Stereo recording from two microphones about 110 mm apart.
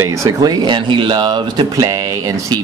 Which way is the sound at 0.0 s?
30° right (ahead or behind).